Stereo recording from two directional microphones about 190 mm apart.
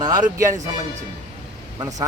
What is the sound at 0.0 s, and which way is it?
Speech, 15° right (ahead or behind).